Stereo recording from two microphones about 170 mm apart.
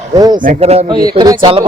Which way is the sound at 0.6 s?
40° right (ahead or behind).